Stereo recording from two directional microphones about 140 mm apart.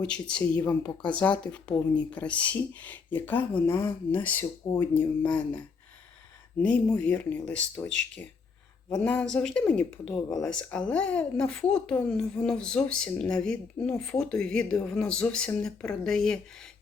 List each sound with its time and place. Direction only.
0.0 s speech: 5° left (ahead or behind)
6.6 s speech: 10° left (ahead or behind)